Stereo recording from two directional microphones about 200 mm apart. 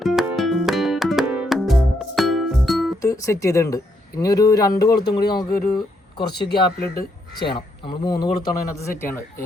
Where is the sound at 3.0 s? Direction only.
15° left (ahead or behind).